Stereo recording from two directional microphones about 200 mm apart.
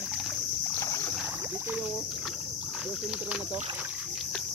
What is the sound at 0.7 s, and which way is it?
Boat, 15° left (ahead or behind).